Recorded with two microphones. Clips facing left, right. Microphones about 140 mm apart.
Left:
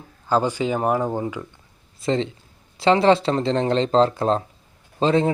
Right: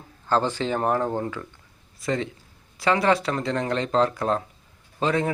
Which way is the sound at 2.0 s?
25° left (ahead or behind).